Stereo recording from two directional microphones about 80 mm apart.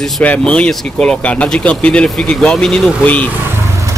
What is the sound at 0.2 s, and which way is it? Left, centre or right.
Speech, centre.